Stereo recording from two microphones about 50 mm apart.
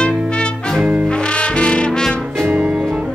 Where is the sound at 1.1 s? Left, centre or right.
Left.